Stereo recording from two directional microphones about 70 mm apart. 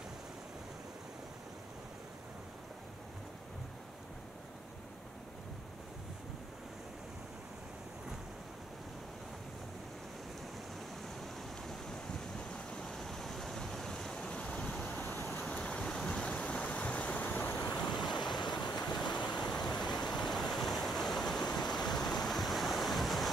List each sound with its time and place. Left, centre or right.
11.1 s a sound: centre; by 15.2 s left
15.3 s waves: centre; by 17.7 s left
18.0 s vehicle: left
18.5 s waves: left
20.0 s stream: centre